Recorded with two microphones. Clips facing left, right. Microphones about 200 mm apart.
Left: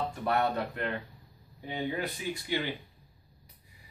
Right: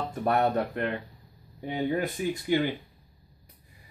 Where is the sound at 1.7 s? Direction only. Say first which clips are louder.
Right 5 dB; 50° right (ahead or behind).